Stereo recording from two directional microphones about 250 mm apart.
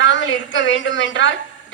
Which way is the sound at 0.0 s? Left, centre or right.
Left.